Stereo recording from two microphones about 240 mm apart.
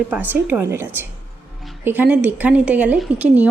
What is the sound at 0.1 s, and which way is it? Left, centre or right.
A woman's voice, centre.